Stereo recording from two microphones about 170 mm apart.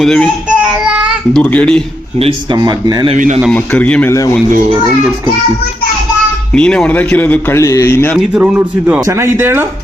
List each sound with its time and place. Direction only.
0.0 s a child's voice: 5° left (ahead or behind)
0.4 s child singing: 5° right (ahead or behind)
1.3 s a man's voice: 10° left (ahead or behind)
2.1 s speech: 35° right (ahead or behind)
2.6 s speech: 25° right (ahead or behind)
3.2 s speech: 45° right (ahead or behind)
3.5 s a man's voice: 10° left (ahead or behind)
6.5 s a man's voice: 5° left (ahead or behind)
8.3 s speech: 10° right (ahead or behind)